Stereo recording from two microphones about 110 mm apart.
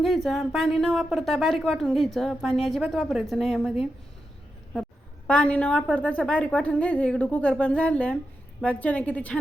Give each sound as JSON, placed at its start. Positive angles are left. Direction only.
{"t": 0.0, "sound": "speech", "side_deg": 0}
{"t": 5.3, "sound": "speech", "side_deg": 10}